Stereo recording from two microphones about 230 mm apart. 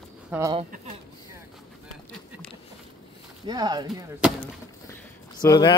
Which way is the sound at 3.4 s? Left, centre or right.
Centre.